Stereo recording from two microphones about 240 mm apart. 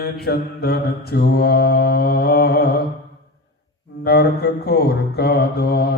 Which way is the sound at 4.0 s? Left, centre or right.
Left.